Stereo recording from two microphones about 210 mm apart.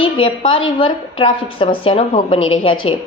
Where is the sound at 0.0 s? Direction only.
25° left (ahead or behind).